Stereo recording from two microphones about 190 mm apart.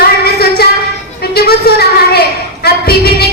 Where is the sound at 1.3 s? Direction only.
55° left (ahead or behind).